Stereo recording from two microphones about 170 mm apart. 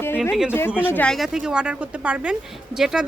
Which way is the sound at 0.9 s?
10° left (ahead or behind).